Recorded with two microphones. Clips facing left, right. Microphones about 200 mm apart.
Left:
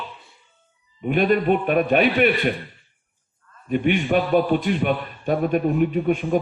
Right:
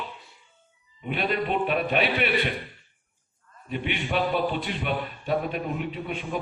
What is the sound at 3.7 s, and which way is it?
A man's voice, 50° left (ahead or behind).